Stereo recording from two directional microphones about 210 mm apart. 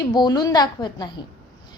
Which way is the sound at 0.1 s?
20° left (ahead or behind).